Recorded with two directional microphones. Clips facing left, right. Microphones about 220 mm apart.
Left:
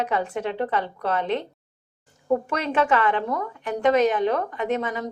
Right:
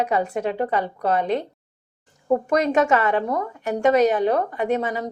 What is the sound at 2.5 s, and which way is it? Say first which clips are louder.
Speech: right 5 dB; 40° right (ahead or behind).